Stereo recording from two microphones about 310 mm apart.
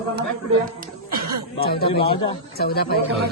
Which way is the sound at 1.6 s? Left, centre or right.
Left.